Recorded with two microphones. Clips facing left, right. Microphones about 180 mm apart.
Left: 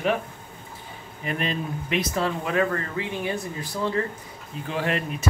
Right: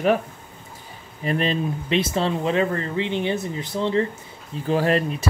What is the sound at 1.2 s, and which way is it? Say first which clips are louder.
Speech: right 5 dB; 30° right (ahead or behind).